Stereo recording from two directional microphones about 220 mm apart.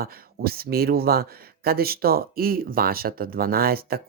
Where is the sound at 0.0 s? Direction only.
45° right (ahead or behind).